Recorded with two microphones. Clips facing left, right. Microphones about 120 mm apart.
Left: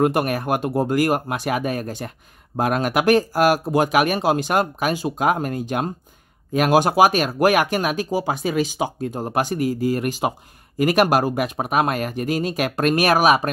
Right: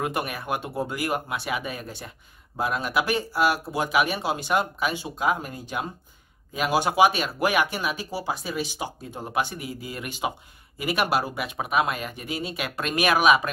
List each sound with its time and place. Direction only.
0.0 s speech: 50° left (ahead or behind)
8.5 s speech: 90° left
9.1 s speech: 45° left (ahead or behind)